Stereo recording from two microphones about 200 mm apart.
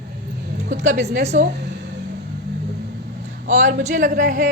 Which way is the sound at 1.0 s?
35° right (ahead or behind).